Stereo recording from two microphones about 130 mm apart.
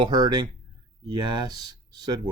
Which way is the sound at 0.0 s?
30° right (ahead or behind).